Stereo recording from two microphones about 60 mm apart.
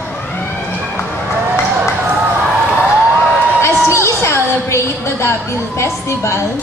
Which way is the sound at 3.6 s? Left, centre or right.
Left.